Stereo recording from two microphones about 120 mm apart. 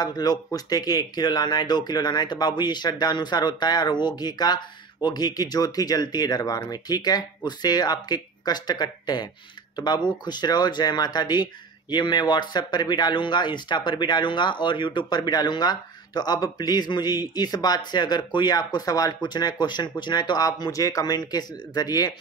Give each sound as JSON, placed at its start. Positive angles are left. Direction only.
{"t": 0.0, "sound": "speech", "side_deg": 35}